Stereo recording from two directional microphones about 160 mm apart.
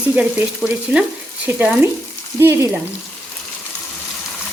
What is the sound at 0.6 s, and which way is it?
Stir, 5° right (ahead or behind).